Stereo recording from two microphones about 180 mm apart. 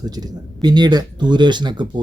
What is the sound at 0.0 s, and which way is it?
Speech, 20° right (ahead or behind).